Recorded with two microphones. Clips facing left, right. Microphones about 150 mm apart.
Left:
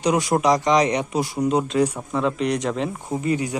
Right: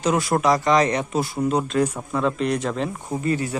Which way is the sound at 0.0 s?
15° left (ahead or behind).